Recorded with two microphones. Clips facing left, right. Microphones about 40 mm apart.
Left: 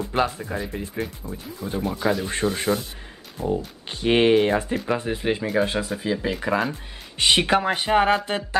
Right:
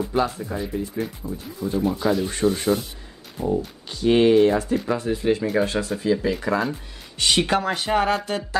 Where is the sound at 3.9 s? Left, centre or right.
Left.